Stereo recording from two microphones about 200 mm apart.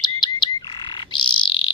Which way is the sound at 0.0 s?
20° left (ahead or behind).